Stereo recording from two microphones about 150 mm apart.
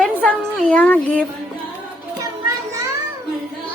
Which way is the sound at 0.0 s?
10° left (ahead or behind).